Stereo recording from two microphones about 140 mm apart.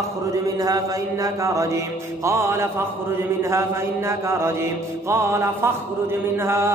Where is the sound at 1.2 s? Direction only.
20° right (ahead or behind).